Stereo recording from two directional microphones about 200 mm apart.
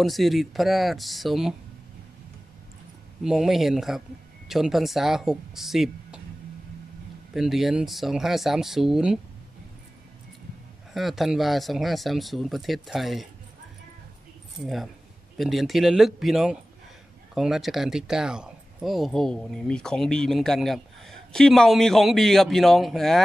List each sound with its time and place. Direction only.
0.0 s speech: centre (ahead or behind)
3.3 s speech: centre (ahead or behind)
7.3 s speech: centre (ahead or behind)
10.9 s speech: centre (ahead or behind)
15.3 s speech: centre (ahead or behind)